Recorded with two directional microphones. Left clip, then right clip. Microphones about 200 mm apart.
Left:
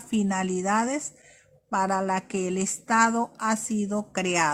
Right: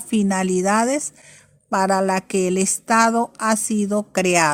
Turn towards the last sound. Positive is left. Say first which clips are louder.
# right 7 dB
turn(degrees=-40)  # may be behind; listen again after turning